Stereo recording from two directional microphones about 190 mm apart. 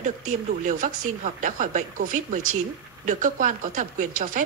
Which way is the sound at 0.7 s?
45° right (ahead or behind).